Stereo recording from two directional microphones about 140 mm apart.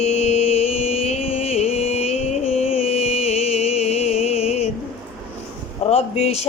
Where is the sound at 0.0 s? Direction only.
50° left (ahead or behind).